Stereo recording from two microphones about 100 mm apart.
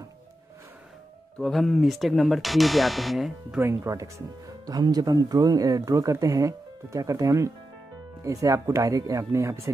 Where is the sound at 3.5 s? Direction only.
25° right (ahead or behind).